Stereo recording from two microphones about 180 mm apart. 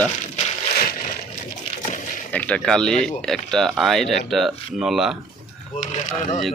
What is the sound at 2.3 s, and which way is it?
Speech, 5° left (ahead or behind).